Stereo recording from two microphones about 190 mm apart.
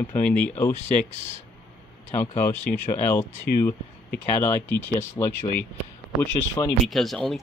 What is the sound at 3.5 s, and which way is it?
Speech, 55° left (ahead or behind).